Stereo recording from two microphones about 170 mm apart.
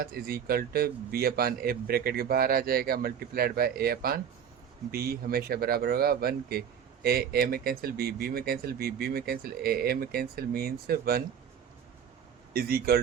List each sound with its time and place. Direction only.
0.0 s speech: 65° right (ahead or behind)
12.5 s speech: 60° right (ahead or behind)